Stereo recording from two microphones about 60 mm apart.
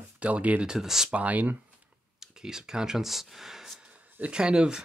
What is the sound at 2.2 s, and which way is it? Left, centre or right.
Speech, centre.